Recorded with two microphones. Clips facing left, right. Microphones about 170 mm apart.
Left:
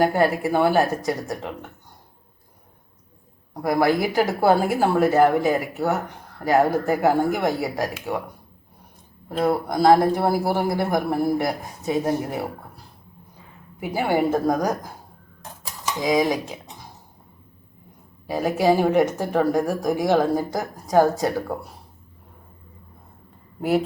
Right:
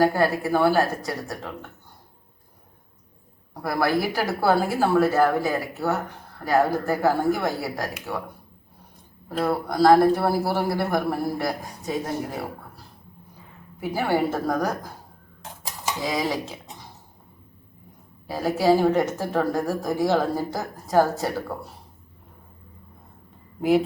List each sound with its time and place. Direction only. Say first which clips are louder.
0.0 s a man's voice: left 1 dB; 20° left (ahead or behind)
3.5 s a woman's voice: left 3 dB; 15° left (ahead or behind)
9.4 s a man's voice: left 1 dB; 20° left (ahead or behind)
13.7 s a woman's voice: left 1 dB; 15° left (ahead or behind)
16.0 s a woman's voice: left 6 dB; 15° left (ahead or behind)
18.3 s a woman's voice: left 1 dB; 15° left (ahead or behind)
23.6 s a woman's voice: right 1 dB; 5° left (ahead or behind)